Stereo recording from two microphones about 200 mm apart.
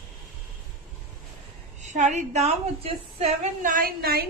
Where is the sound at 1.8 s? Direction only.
35° right (ahead or behind).